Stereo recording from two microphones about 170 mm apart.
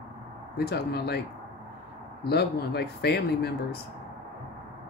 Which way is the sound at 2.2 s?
70° left (ahead or behind).